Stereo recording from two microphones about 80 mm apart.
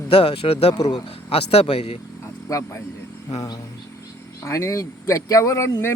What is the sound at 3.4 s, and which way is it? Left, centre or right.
Speech, left.